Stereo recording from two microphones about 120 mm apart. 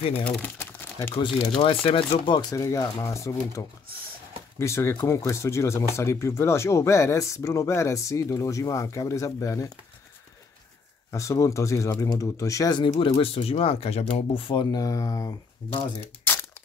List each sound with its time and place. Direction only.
0.1 s speech: 20° left (ahead or behind)
1.6 s speech: 50° left (ahead or behind)
2.5 s speech: 25° left (ahead or behind)
11.1 s speech: 25° left (ahead or behind)
13.2 s speech: 55° left (ahead or behind); by 15.3 s 30° left (ahead or behind)